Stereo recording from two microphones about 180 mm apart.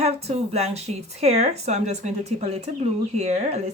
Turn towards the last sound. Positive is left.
turn(degrees=-35)  # may be behind; listen again after turning